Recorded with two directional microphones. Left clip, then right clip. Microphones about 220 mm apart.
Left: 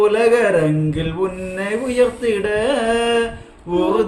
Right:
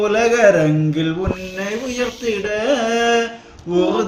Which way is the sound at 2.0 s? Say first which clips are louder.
Left 6 dB; 15° left (ahead or behind).